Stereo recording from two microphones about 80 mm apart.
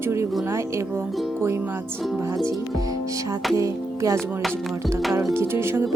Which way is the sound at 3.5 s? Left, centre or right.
Right.